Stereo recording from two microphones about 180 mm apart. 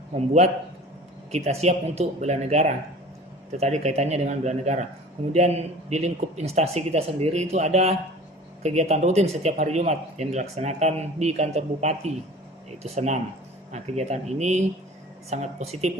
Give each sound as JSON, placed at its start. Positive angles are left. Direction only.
{"t": 1.3, "sound": "speech", "side_deg": -35}